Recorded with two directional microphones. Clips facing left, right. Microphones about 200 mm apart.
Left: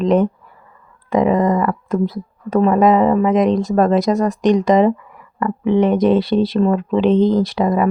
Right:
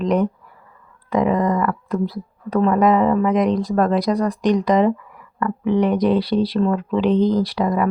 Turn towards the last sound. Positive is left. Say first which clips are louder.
# left 3 dB
turn(degrees=20)  # may be behind; listen again after turning